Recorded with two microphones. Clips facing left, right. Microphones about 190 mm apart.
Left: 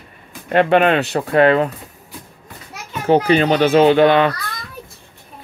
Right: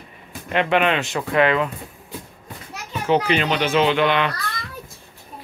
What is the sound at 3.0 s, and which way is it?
A child's voice, 40° left (ahead or behind).